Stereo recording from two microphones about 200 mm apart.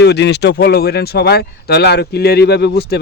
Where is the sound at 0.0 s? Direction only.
55° left (ahead or behind).